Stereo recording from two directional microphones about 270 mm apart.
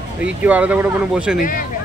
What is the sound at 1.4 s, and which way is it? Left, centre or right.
Speech, left.